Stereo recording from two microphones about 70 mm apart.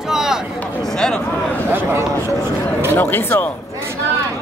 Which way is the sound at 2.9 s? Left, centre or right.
Left.